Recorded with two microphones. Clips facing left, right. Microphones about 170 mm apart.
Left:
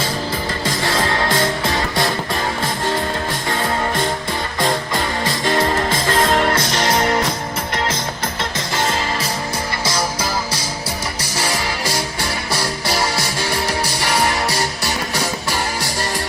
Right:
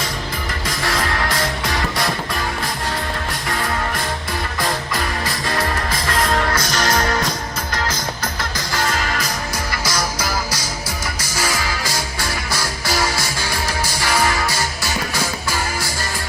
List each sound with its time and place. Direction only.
0.6 s music: 25° left (ahead or behind)
3.5 s music: 25° left (ahead or behind)
13.1 s music: 65° left (ahead or behind)